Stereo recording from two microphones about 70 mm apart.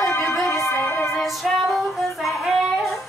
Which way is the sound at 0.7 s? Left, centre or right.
Left.